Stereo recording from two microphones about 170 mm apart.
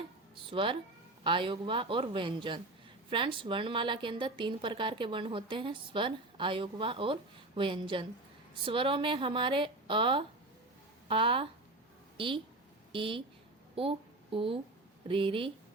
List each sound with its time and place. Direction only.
0.5 s a woman's voice: 30° right (ahead or behind)